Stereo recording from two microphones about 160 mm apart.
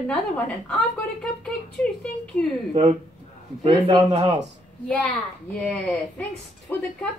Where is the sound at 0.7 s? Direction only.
5° left (ahead or behind).